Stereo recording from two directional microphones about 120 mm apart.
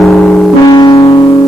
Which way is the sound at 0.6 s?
35° left (ahead or behind).